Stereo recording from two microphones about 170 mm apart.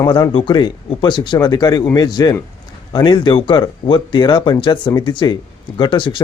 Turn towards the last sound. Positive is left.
turn(degrees=30)  # may be behind; listen again after turning